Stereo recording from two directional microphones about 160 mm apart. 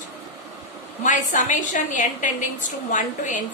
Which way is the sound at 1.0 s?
50° left (ahead or behind).